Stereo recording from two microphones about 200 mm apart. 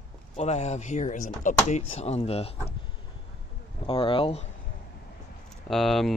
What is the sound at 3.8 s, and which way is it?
Speech, 25° left (ahead or behind).